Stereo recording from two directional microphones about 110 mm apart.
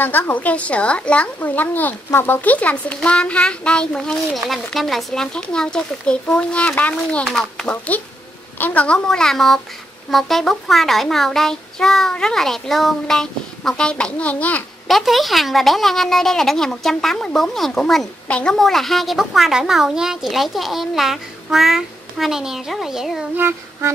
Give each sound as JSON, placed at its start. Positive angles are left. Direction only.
{"t": 0.0, "sound": "a woman's voice", "side_deg": 20}
{"t": 7.7, "sound": "a woman's voice", "side_deg": 15}
{"t": 14.9, "sound": "a woman's voice", "side_deg": 0}
{"t": 23.3, "sound": "child singing", "side_deg": -20}